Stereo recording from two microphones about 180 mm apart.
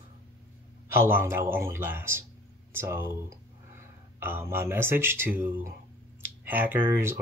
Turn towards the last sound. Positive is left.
turn(degrees=-10)  # may be behind; listen again after turning